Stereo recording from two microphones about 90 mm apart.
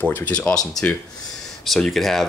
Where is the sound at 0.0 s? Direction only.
20° left (ahead or behind).